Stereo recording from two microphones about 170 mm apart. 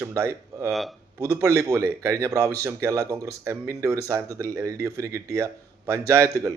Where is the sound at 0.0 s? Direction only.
15° right (ahead or behind).